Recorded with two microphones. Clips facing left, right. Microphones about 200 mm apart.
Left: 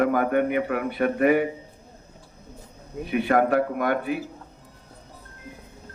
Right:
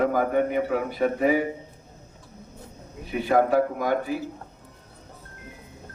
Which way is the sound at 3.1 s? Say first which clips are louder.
Even; 60° left (ahead or behind).